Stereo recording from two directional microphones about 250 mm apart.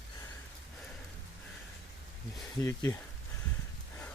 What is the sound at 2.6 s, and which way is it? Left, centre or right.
Speech, centre.